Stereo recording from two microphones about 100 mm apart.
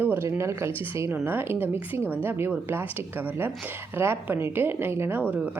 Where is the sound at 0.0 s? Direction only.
20° right (ahead or behind).